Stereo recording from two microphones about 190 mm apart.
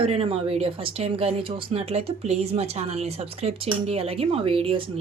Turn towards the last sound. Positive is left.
turn(degrees=-30)  # may be behind; listen again after turning